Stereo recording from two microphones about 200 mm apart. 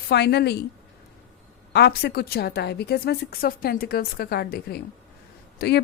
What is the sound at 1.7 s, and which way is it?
A woman's voice, 55° left (ahead or behind).